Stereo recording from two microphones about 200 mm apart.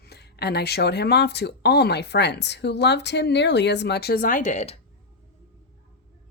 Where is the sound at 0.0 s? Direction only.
55° left (ahead or behind); by 4.8 s 35° left (ahead or behind).